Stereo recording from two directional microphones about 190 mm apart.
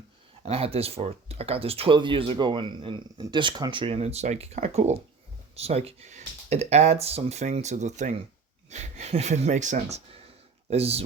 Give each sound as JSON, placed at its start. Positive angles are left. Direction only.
{"t": 0.4, "sound": "speech", "side_deg": -30}